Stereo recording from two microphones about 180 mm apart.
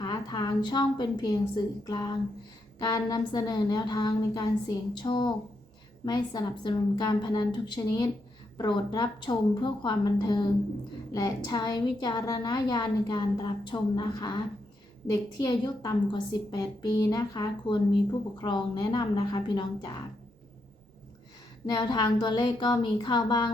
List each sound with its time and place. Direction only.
0.0 s a woman's voice: 25° left (ahead or behind)
21.7 s a woman's voice: 25° left (ahead or behind)